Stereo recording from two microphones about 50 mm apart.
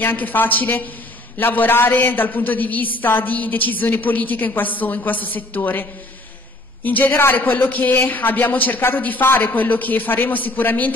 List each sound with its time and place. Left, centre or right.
0.0 s a man's voice: left